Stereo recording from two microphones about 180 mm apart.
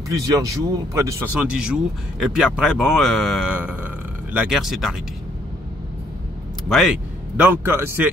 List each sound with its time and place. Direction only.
0.1 s speech: 20° right (ahead or behind)
1.4 s speech: 5° right (ahead or behind)
6.7 s speech: centre (ahead or behind)
7.3 s a man's voice: 10° right (ahead or behind)